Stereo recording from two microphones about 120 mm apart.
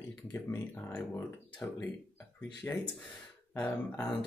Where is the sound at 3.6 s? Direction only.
15° left (ahead or behind).